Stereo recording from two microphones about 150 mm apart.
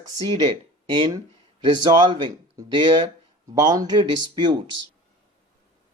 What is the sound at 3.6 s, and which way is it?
Speech, 25° right (ahead or behind).